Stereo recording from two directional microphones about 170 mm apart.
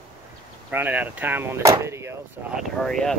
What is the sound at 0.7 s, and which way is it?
Speech, 10° right (ahead or behind).